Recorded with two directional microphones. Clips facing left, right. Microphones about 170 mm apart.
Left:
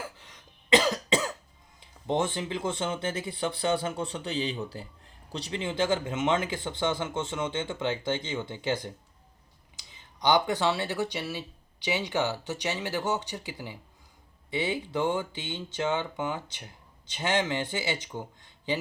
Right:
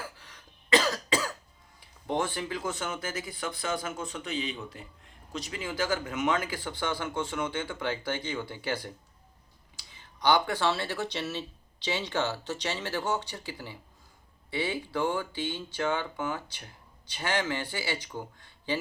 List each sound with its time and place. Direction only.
0.2 s cough: 20° left (ahead or behind)
1.8 s speech: 20° left (ahead or behind)